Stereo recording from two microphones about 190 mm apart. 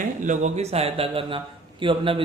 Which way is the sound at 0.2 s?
40° right (ahead or behind).